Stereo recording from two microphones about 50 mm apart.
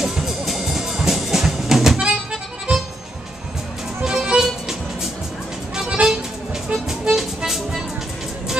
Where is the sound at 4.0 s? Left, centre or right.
Centre.